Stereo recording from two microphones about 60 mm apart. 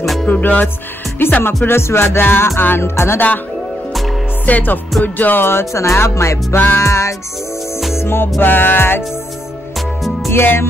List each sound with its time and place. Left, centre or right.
0.0 s music: centre
0.3 s music: left
4.5 s music: left
6.5 s music: left
6.8 s music: left
8.4 s music: left
10.3 s music: left